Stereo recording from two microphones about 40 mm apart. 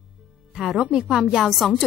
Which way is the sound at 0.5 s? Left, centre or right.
Centre.